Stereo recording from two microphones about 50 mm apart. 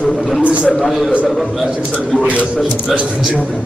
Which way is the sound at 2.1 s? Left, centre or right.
Left.